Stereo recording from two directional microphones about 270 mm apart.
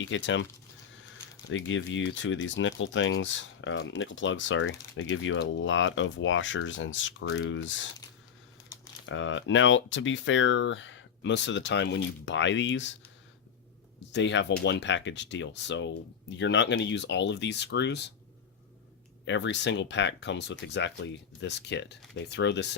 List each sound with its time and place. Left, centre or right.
0.0 s speech: left
1.5 s speech: left
9.0 s speech: left
14.1 s speech: left
19.2 s speech: left